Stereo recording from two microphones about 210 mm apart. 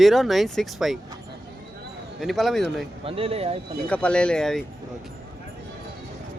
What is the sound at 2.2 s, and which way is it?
Speech, centre (ahead or behind).